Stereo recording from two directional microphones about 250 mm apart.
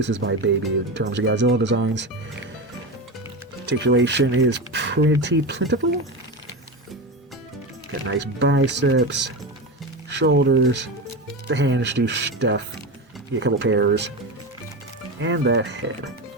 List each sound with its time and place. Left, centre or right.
0.0 s speech: right
3.7 s speech: right
8.0 s speech: right
15.2 s speech: right